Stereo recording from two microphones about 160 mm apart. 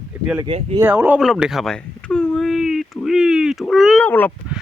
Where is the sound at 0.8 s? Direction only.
10° right (ahead or behind); by 4.3 s 10° left (ahead or behind).